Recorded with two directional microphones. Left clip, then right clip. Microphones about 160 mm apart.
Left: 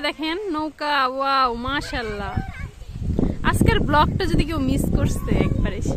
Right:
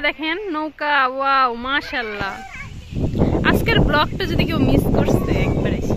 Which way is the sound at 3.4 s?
10° left (ahead or behind).